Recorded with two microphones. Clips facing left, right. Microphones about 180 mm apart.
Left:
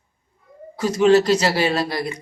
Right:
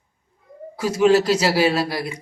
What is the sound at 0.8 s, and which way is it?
Speech, 5° right (ahead or behind).